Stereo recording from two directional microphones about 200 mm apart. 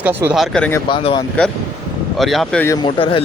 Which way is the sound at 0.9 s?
25° left (ahead or behind).